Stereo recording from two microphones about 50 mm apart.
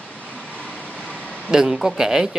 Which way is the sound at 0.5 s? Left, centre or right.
Left.